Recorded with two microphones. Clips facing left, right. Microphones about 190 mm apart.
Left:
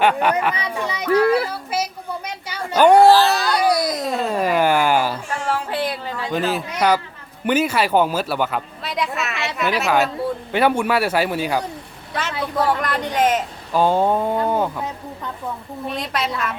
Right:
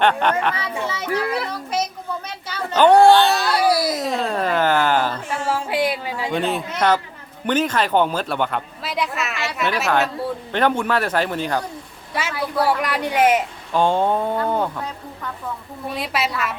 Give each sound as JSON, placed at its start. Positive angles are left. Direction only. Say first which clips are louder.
{"t": 0.0, "sound": "speech", "louder": "left 1 dB", "side_deg": 5}
{"t": 0.8, "sound": "children playing", "louder": "left 2 dB", "side_deg": 15}
{"t": 1.5, "sound": "a sound", "louder": "even", "side_deg": 5}
{"t": 5.5, "sound": "a sound", "louder": "right 2 dB", "side_deg": -10}
{"t": 6.3, "sound": "speech", "louder": "left 1 dB", "side_deg": 0}
{"t": 12.3, "sound": "speech", "louder": "even", "side_deg": 20}
{"t": 12.6, "sound": "speech", "louder": "right 1 dB", "side_deg": -10}
{"t": 13.7, "sound": "speech", "louder": "left 1 dB", "side_deg": 5}
{"t": 14.8, "sound": "speech", "louder": "left 2 dB", "side_deg": 20}
{"t": 16.0, "sound": "speech", "louder": "right 2 dB", "side_deg": -5}